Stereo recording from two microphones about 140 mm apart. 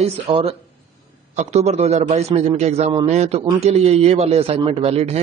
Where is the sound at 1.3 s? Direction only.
55° right (ahead or behind).